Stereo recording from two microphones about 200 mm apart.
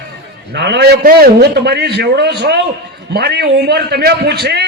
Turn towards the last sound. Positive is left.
turn(degrees=-55)  # may be behind; listen again after turning